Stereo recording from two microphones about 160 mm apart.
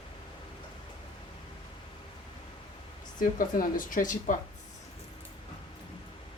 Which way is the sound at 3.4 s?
60° left (ahead or behind).